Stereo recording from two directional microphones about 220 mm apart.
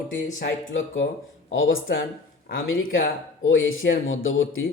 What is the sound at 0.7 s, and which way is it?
Speech, 60° left (ahead or behind).